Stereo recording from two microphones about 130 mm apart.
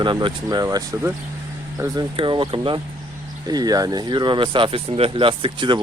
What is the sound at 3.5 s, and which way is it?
Speech, 30° right (ahead or behind).